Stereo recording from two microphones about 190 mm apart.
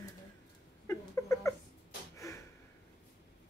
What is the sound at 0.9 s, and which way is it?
Cat, 15° left (ahead or behind).